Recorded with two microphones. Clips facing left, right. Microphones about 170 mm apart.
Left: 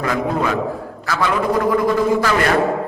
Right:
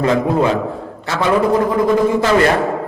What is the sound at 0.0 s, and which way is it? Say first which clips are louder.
A man's voice: right 5 dB; 25° right (ahead or behind).